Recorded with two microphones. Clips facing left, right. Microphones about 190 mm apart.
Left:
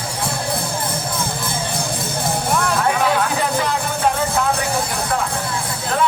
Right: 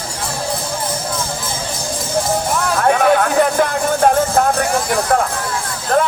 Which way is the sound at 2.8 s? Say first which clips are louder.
Right 9 dB; 55° right (ahead or behind).